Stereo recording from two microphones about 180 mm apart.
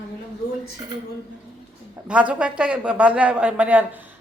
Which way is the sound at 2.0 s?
5° right (ahead or behind).